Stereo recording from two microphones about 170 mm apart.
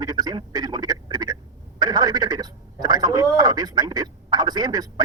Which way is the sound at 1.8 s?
20° right (ahead or behind).